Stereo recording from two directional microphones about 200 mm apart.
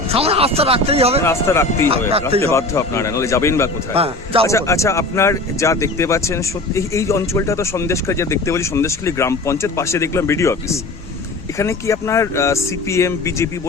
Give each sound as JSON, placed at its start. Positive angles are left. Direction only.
{"t": 0.1, "sound": "speech", "side_deg": -30}
{"t": 1.2, "sound": "speech", "side_deg": 15}
{"t": 3.9, "sound": "speech", "side_deg": -30}
{"t": 4.4, "sound": "speech", "side_deg": 15}